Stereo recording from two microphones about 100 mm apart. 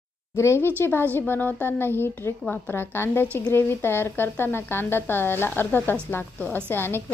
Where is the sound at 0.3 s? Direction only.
25° left (ahead or behind).